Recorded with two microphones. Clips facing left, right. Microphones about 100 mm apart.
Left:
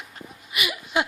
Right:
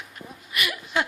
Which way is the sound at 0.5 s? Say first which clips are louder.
Left 1 dB; 10° left (ahead or behind).